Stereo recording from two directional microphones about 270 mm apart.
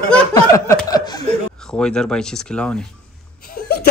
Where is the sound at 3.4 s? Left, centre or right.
Left.